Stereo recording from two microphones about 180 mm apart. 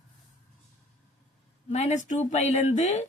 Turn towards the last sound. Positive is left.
turn(degrees=40)  # may be behind; listen again after turning